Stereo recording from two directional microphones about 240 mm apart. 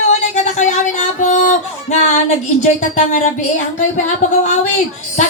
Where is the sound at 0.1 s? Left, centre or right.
Left.